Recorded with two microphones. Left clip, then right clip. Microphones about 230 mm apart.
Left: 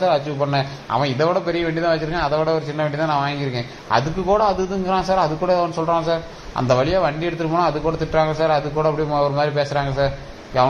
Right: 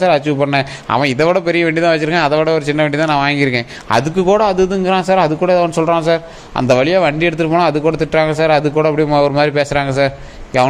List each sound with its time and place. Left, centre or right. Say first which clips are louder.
0.0 s a man's voice: right 6 dB; right